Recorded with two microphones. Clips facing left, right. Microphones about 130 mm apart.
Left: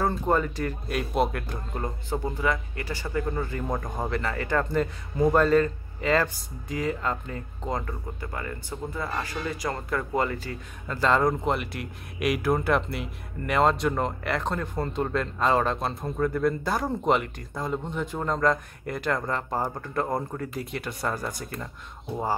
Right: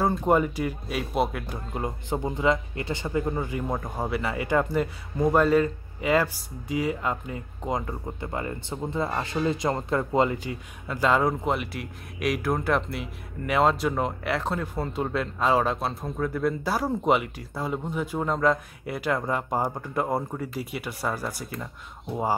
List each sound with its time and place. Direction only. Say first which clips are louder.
0.2 s speech: right 3 dB; 15° right (ahead or behind)